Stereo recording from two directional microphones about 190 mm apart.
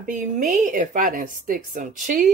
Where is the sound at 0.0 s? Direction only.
45° right (ahead or behind).